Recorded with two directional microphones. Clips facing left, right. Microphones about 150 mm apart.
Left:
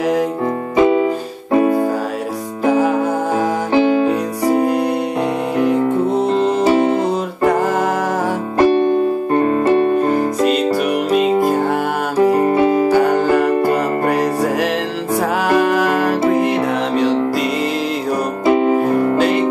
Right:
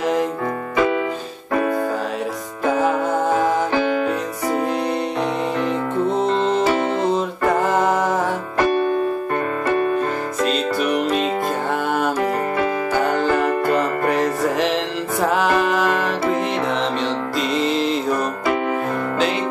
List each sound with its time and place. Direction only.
0.7 s music: 25° left (ahead or behind)
3.7 s music: 20° left (ahead or behind)
6.2 s music: 5° left (ahead or behind)
6.6 s music: 35° left (ahead or behind)
9.3 s music: 30° left (ahead or behind)
10.9 s music: 5° left (ahead or behind)
12.2 s music: 30° left (ahead or behind)
13.2 s music: 10° left (ahead or behind)
18.4 s music: 25° left (ahead or behind)